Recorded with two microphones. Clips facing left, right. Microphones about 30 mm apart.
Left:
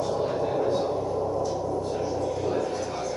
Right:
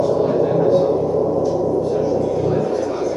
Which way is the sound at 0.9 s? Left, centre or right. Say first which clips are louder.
Right 10 dB; right.